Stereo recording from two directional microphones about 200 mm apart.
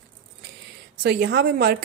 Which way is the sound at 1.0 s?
55° right (ahead or behind).